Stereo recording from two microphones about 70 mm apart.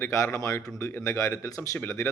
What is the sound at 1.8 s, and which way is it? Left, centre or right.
Speech, left.